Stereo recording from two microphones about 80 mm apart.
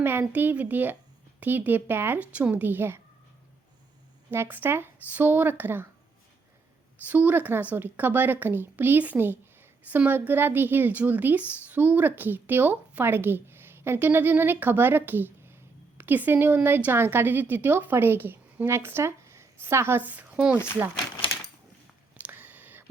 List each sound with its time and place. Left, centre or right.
0.0 s a woman's voice: right
4.3 s a woman's voice: right
7.1 s a woman's voice: right
22.1 s a sound: right